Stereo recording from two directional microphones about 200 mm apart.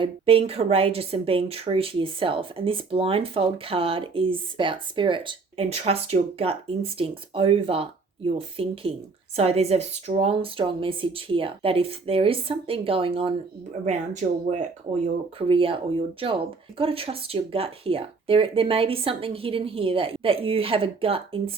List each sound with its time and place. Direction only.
0.0 s a woman's voice: 30° right (ahead or behind)